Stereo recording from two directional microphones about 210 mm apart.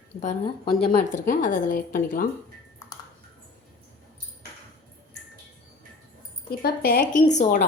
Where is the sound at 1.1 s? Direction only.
35° left (ahead or behind).